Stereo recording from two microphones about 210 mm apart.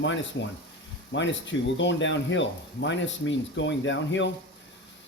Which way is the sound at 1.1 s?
60° left (ahead or behind).